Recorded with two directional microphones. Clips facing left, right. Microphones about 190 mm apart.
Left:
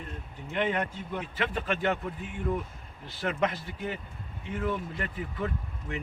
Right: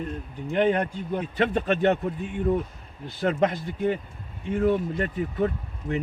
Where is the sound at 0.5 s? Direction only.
35° right (ahead or behind).